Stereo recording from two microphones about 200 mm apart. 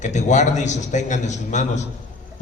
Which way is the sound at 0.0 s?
35° left (ahead or behind).